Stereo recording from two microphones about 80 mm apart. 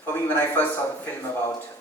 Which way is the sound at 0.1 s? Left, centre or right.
Left.